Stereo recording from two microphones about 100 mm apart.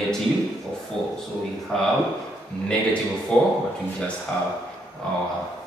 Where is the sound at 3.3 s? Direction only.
10° left (ahead or behind).